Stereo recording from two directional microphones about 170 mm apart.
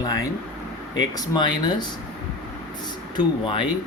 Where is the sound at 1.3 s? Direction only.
25° left (ahead or behind).